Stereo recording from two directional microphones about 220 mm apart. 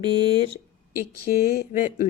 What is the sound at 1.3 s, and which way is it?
Speech, 45° left (ahead or behind).